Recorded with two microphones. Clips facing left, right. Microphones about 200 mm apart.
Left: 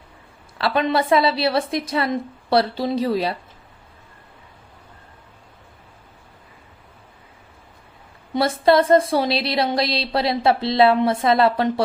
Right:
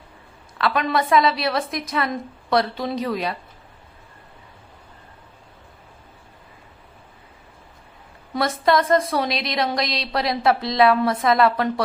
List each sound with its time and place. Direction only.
0.6 s speech: 30° left (ahead or behind)
8.3 s speech: 30° left (ahead or behind)